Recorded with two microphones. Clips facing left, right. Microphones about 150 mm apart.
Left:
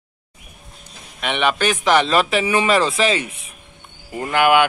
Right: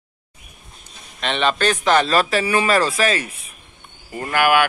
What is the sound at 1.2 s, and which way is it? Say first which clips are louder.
A man's voice: even; 10° left (ahead or behind).